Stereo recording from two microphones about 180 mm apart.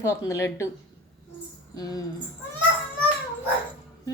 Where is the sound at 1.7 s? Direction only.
20° left (ahead or behind).